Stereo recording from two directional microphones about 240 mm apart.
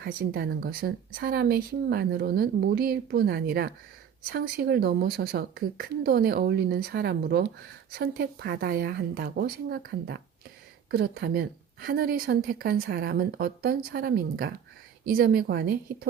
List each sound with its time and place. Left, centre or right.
0.0 s speech: right